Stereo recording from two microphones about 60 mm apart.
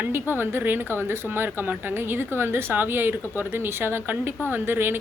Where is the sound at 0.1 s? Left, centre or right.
Right.